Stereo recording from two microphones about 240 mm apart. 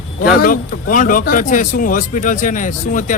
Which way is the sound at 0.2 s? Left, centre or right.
Left.